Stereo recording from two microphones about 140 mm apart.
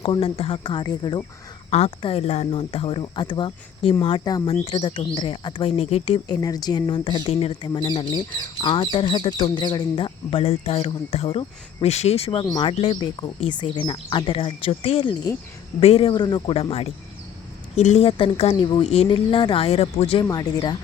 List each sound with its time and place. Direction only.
0.0 s speech: 40° left (ahead or behind)
4.6 s speech: 45° left (ahead or behind)
6.2 s speech: 30° left (ahead or behind)
12.7 s speech: 45° left (ahead or behind)
13.0 s speech: 30° left (ahead or behind)
20.2 s speech: 30° left (ahead or behind)